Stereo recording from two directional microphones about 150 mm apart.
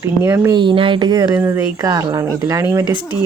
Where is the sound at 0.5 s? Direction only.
35° right (ahead or behind).